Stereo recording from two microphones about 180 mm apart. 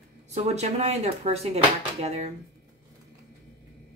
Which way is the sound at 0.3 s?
40° right (ahead or behind).